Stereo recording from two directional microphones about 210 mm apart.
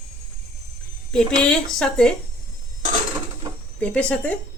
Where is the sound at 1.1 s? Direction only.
5° left (ahead or behind).